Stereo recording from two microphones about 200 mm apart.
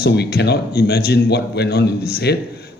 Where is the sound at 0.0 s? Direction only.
55° left (ahead or behind).